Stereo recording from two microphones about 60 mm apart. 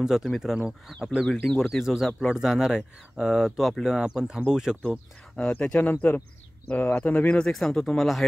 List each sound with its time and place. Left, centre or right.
0.0 s speech: centre
1.2 s speech: centre
5.5 s speech: left
7.5 s speech: centre